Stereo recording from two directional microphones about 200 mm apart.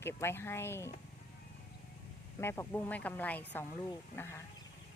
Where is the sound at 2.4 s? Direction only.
10° left (ahead or behind).